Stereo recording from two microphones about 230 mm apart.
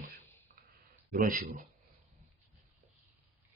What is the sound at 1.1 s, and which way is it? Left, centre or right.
Speech, right.